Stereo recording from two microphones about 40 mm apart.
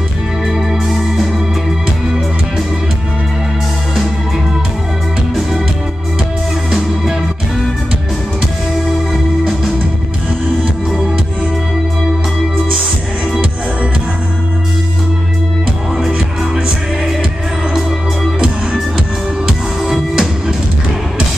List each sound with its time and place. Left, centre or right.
0.8 s music: centre
8.8 s music: centre
16.1 s music: right
19.8 s music: centre